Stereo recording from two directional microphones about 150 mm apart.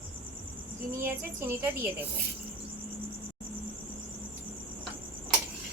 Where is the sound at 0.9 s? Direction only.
15° right (ahead or behind).